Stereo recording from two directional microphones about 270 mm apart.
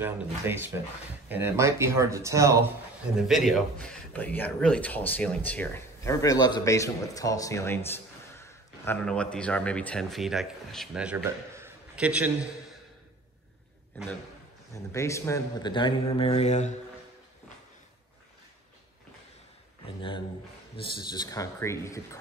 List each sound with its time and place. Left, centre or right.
0.0 s speech: centre
3.3 s a man's voice: centre
13.9 s a man's voice: centre; by 16.7 s left
20.0 s a man's voice: centre